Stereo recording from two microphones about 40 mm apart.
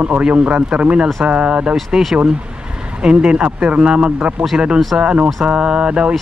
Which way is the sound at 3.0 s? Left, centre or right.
Right.